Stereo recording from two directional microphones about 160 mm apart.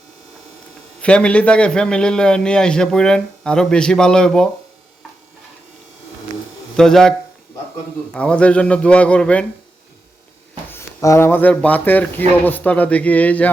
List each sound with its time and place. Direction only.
1.0 s a man's voice: 5° left (ahead or behind)
6.7 s a man's voice: 5° left (ahead or behind)
8.1 s a man's voice: 5° left (ahead or behind)
10.7 s a man's voice: 15° left (ahead or behind)